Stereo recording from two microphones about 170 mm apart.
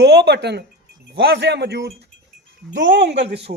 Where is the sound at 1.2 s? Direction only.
90° right.